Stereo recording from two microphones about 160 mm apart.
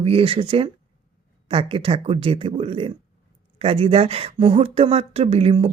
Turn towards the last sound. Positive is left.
turn(degrees=-35)  # may be behind; listen again after turning